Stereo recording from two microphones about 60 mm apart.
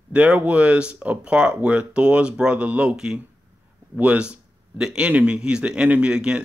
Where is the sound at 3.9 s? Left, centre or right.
Right.